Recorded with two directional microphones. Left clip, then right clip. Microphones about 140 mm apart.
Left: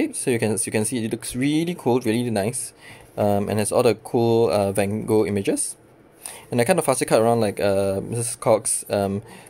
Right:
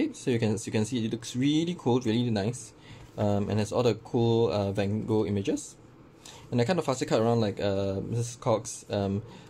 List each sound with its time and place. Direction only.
0.0 s speech: 35° left (ahead or behind)